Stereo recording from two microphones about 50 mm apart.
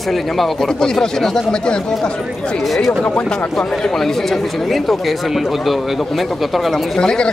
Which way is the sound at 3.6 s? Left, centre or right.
Centre.